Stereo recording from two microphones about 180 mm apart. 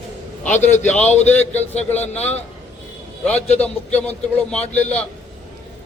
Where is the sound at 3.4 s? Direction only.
35° left (ahead or behind).